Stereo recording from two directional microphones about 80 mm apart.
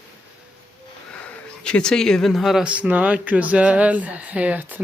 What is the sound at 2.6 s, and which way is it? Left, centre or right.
Speech, centre.